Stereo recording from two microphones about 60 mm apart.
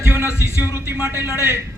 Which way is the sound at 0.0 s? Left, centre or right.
Right.